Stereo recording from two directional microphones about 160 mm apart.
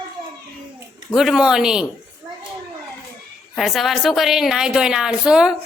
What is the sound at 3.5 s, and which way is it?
A woman's voice, centre (ahead or behind).